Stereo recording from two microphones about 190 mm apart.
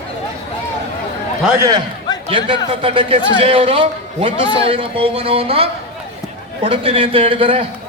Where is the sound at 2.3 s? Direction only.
25° right (ahead or behind).